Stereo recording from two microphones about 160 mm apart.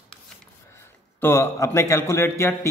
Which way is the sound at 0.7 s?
15° left (ahead or behind).